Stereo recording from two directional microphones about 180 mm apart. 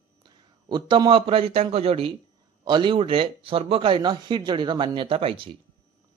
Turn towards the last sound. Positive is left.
turn(degrees=-30)  # may be behind; listen again after turning